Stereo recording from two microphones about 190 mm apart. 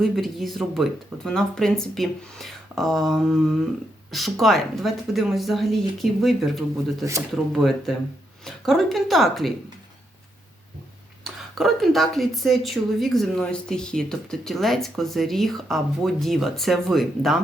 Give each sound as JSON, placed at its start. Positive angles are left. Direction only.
{"t": 0.0, "sound": "speech", "side_deg": 0}
{"t": 7.0, "sound": "speech", "side_deg": -15}
{"t": 7.5, "sound": "speech", "side_deg": 0}
{"t": 11.2, "sound": "speech", "side_deg": 0}